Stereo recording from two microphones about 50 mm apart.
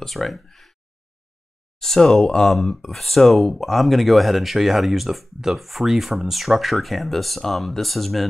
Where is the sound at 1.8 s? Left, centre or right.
Centre.